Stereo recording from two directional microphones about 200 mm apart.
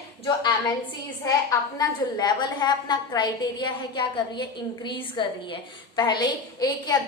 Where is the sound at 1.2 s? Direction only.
15° left (ahead or behind).